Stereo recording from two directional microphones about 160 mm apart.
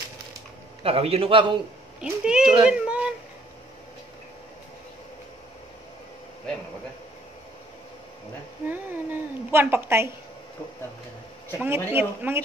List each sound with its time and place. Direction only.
0.8 s a man's voice: 40° right (ahead or behind)
2.0 s speech: 5° right (ahead or behind)
8.6 s cat: 10° right (ahead or behind)
11.6 s a man's voice: 15° right (ahead or behind)